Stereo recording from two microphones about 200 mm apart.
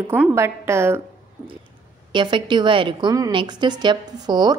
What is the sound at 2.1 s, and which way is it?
A woman's voice, 25° right (ahead or behind).